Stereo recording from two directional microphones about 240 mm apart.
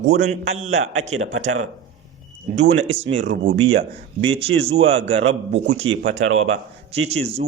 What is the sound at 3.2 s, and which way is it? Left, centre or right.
Speech, right.